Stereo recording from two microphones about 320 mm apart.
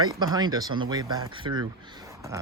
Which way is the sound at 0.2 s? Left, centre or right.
Centre.